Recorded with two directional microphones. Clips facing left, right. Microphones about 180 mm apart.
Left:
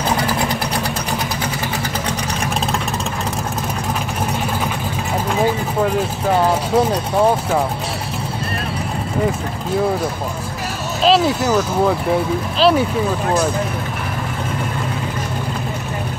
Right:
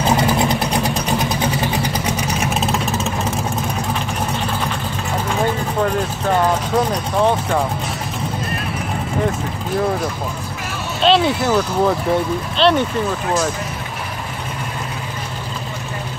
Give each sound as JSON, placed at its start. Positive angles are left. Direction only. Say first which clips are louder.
{"t": 0.2, "sound": "vehicle", "louder": "right 3 dB", "side_deg": -25}
{"t": 2.4, "sound": "vehicle", "louder": "right 1 dB", "side_deg": -5}
{"t": 5.3, "sound": "speech", "louder": "left 2 dB", "side_deg": 5}
{"t": 11.0, "sound": "speech", "louder": "even", "side_deg": 0}